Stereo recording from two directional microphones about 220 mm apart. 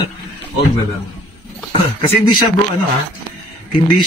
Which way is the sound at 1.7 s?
20° left (ahead or behind).